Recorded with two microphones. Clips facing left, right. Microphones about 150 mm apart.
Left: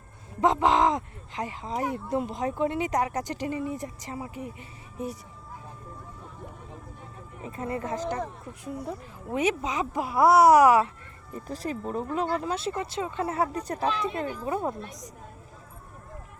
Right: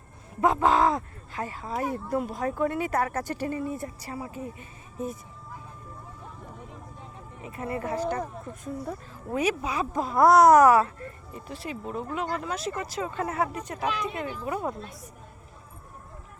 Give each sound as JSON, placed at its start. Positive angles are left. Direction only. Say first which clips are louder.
{"t": 0.4, "sound": "speech", "louder": "even", "side_deg": 20}
{"t": 7.4, "sound": "speech", "louder": "even", "side_deg": 30}
{"t": 9.3, "sound": "speech", "louder": "even", "side_deg": 25}
{"t": 11.4, "sound": "speech", "louder": "left 3 dB", "side_deg": 40}
{"t": 14.4, "sound": "speech", "louder": "left 1 dB", "side_deg": 25}